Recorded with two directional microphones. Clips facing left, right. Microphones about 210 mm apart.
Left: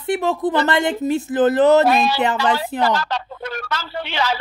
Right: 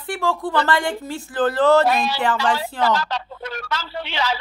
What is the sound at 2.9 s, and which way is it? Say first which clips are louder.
Speech: left 1 dB; 50° left (ahead or behind).